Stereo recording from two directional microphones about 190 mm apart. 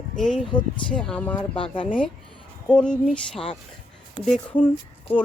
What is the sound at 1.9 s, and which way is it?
Speech, 5° left (ahead or behind).